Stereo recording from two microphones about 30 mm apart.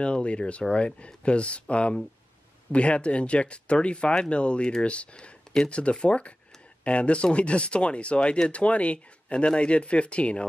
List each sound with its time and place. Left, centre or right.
0.0 s speech: left